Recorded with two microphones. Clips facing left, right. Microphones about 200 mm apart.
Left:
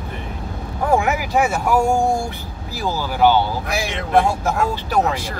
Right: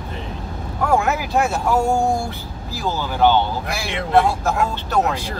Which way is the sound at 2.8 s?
10° left (ahead or behind).